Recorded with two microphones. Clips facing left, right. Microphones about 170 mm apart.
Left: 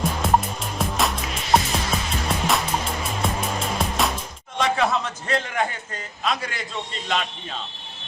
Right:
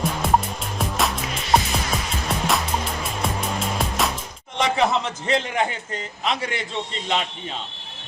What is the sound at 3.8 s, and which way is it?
Music, centre (ahead or behind).